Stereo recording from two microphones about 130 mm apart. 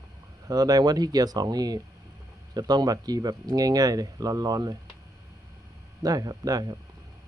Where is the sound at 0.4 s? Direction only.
30° right (ahead or behind).